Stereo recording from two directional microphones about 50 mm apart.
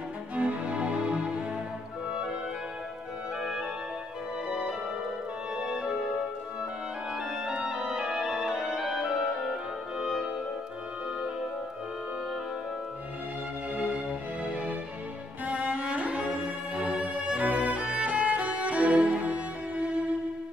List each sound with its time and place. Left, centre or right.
0.4 s music: right
3.3 s music: centre
6.6 s organ: centre
7.5 s music: centre
13.7 s music: right